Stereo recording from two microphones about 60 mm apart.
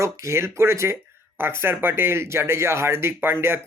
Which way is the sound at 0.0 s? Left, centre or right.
Right.